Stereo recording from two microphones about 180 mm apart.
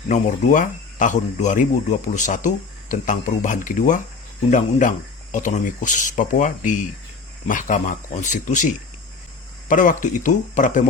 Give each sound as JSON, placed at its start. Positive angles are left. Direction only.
{"t": 0.1, "sound": "speech", "side_deg": 45}